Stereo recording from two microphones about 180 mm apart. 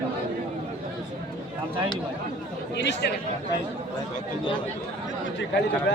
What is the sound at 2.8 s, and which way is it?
Speech, 75° left (ahead or behind).